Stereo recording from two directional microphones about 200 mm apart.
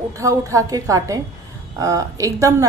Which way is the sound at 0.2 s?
15° right (ahead or behind).